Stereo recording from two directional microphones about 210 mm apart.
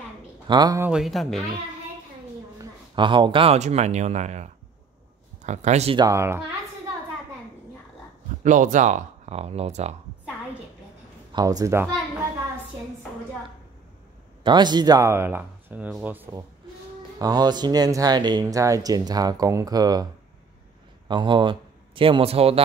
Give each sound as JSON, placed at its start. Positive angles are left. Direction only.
{"t": 0.5, "sound": "speech", "side_deg": -20}
{"t": 0.8, "sound": "speech", "side_deg": 0}
{"t": 2.6, "sound": "speech", "side_deg": -20}
{"t": 6.0, "sound": "speech", "side_deg": -15}
{"t": 8.5, "sound": "speech", "side_deg": -35}
{"t": 11.3, "sound": "speech", "side_deg": -15}
{"t": 14.4, "sound": "speech", "side_deg": -20}
{"t": 21.1, "sound": "speech", "side_deg": -20}